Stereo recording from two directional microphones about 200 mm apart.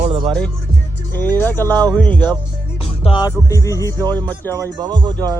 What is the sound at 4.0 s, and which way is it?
Speech, 20° right (ahead or behind).